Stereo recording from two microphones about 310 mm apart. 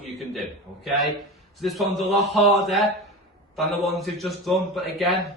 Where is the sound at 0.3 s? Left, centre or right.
Centre.